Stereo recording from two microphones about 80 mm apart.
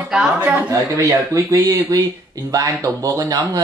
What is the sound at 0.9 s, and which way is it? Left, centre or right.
Speech, right.